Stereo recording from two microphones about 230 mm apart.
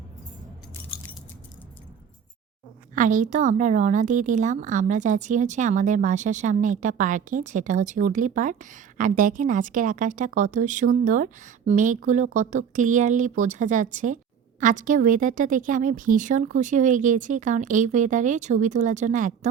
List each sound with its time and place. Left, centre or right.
2.9 s a woman's voice: right